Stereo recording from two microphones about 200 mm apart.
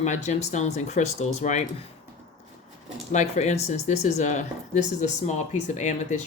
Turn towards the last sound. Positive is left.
turn(degrees=35)  # may be behind; listen again after turning